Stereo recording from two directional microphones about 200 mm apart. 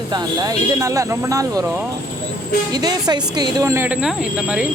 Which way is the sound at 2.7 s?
20° right (ahead or behind).